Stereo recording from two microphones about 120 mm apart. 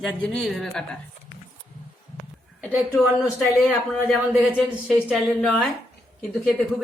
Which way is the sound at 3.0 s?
Centre (ahead or behind).